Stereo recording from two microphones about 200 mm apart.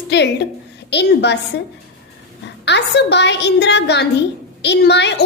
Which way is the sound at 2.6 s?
60° left (ahead or behind).